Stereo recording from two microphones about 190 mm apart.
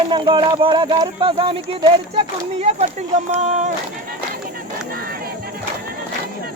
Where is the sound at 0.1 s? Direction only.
25° right (ahead or behind).